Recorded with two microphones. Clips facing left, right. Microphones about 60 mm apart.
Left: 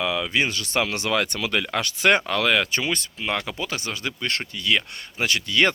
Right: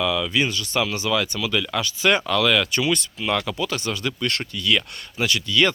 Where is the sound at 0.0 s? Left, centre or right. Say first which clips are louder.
Right 1 dB; left.